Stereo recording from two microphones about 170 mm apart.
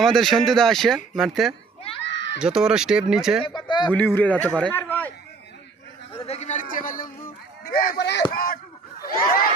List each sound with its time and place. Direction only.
0.0 s speech: centre (ahead or behind)
2.0 s a sound: 90° left
2.4 s speech: 5° right (ahead or behind)
3.4 s speech: 25° left (ahead or behind)
3.9 s speech: 10° left (ahead or behind)
6.1 s a sound: 35° left (ahead or behind); by 7.1 s 50° left (ahead or behind)
7.6 s speech: 60° left (ahead or behind); by 8.2 s 75° left (ahead or behind)
8.3 s speech: 60° left (ahead or behind)
9.0 s a sound: 60° left (ahead or behind)